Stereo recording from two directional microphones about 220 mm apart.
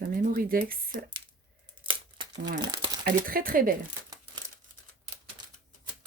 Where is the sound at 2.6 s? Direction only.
20° right (ahead or behind).